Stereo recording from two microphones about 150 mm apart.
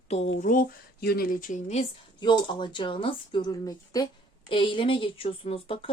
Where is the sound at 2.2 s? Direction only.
30° left (ahead or behind).